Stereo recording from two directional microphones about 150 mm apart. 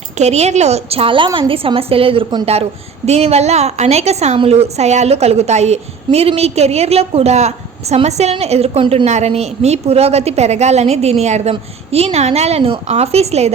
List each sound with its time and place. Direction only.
0.2 s a woman's voice: 45° right (ahead or behind)
9.0 s a woman's voice: 50° right (ahead or behind)